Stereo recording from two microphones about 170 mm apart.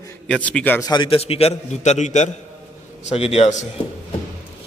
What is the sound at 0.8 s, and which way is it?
A man's voice, 30° left (ahead or behind).